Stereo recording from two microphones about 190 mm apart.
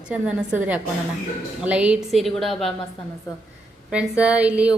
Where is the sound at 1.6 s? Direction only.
5° right (ahead or behind).